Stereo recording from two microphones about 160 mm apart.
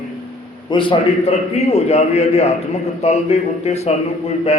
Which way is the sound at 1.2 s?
40° left (ahead or behind).